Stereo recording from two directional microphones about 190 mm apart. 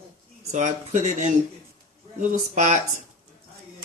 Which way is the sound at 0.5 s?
40° right (ahead or behind).